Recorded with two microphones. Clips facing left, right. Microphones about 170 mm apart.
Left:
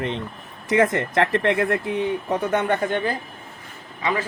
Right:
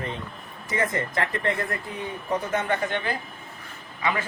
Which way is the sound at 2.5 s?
60° left (ahead or behind).